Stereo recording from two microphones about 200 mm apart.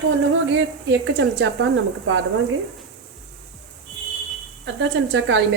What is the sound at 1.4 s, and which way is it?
Speech, 65° right (ahead or behind).